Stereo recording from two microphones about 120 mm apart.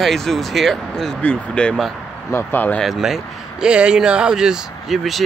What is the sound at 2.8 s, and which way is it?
Speech, centre (ahead or behind).